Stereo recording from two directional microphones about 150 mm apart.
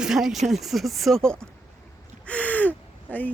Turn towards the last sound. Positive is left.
turn(degrees=10)  # may be behind; listen again after turning